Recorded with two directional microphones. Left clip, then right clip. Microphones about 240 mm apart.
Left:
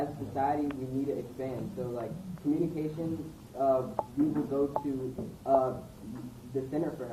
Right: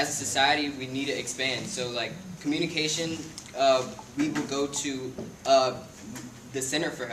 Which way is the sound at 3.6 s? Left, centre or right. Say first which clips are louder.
Right 5 dB; right.